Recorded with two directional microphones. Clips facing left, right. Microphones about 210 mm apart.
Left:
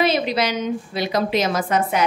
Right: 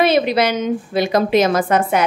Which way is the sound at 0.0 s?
60° right (ahead or behind).